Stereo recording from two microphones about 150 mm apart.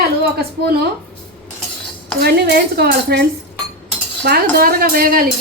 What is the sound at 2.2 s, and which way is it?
A woman's voice, 90° right.